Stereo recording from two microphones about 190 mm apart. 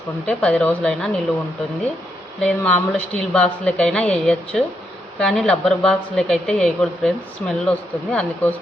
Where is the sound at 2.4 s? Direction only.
5° left (ahead or behind).